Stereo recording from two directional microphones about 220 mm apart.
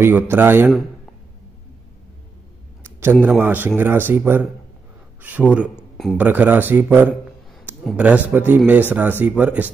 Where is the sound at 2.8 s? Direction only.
10° right (ahead or behind).